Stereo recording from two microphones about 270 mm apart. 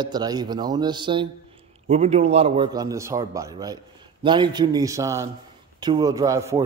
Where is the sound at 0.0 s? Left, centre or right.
Centre.